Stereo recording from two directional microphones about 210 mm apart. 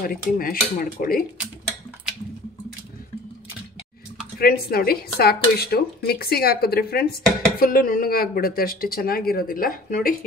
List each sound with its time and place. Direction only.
0.0 s speech: 45° left (ahead or behind)
4.4 s speech: 45° left (ahead or behind)